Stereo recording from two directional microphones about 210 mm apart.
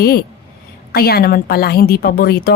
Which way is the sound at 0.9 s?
45° left (ahead or behind).